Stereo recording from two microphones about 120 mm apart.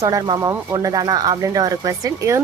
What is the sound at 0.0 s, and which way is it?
Speech, 30° right (ahead or behind).